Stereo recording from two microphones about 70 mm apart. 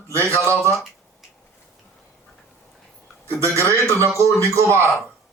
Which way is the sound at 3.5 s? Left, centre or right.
Right.